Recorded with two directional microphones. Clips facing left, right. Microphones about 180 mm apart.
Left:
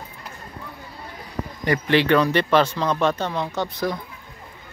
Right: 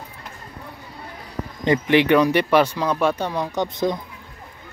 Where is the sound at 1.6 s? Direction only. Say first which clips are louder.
Right 3 dB; 20° right (ahead or behind).